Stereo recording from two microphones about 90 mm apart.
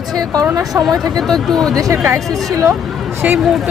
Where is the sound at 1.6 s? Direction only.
40° right (ahead or behind).